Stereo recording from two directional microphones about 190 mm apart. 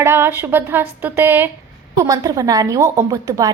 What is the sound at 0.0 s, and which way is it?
A woman's voice, 10° right (ahead or behind).